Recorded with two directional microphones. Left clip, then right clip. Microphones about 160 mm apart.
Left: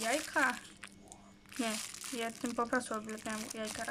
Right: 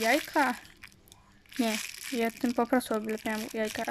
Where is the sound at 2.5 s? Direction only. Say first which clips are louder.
Right 6 dB; 25° right (ahead or behind).